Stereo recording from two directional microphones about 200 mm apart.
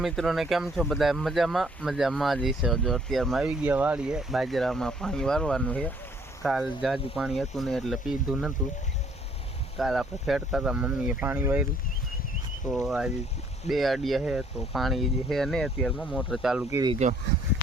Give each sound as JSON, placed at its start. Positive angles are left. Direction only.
{"t": 0.0, "sound": "speech", "side_deg": 0}
{"t": 9.7, "sound": "speech", "side_deg": 0}
{"t": 12.7, "sound": "speech", "side_deg": 0}
{"t": 16.7, "sound": "speech", "side_deg": -20}